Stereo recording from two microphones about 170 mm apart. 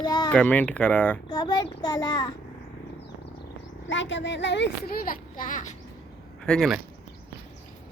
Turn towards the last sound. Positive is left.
turn(degrees=0)  # may be behind; listen again after turning